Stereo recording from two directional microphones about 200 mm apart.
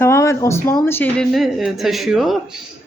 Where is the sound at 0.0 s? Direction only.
15° left (ahead or behind).